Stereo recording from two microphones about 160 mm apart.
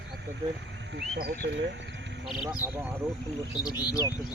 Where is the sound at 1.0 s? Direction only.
70° right (ahead or behind).